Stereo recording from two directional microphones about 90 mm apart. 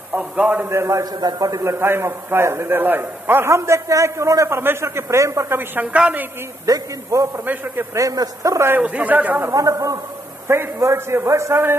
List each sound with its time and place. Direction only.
0.1 s a man's voice: 20° right (ahead or behind)
0.7 s a man's voice: 30° right (ahead or behind)
5.8 s a woman's voice: 15° right (ahead or behind)
6.6 s a man's voice: 40° right (ahead or behind)
8.7 s a man's voice: 15° right (ahead or behind)
9.5 s a man's voice: 40° right (ahead or behind)